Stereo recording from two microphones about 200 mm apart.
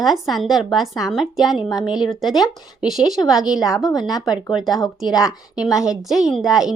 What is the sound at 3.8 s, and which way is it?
Speech, 20° left (ahead or behind).